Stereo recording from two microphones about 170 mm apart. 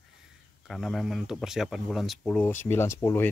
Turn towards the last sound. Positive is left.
turn(degrees=15)  # may be behind; listen again after turning